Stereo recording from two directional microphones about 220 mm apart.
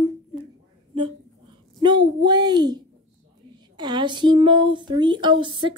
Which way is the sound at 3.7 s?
20° right (ahead or behind).